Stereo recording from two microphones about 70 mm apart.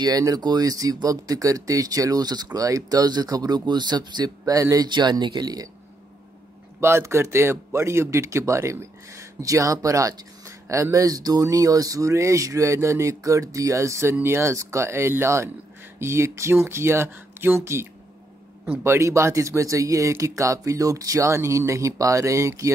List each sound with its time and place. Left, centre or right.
0.4 s speech: right
4.6 s speech: right
4.8 s speech: right
6.8 s speech: right